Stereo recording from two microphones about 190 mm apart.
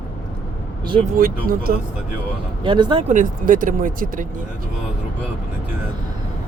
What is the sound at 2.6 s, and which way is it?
Speech, 25° right (ahead or behind).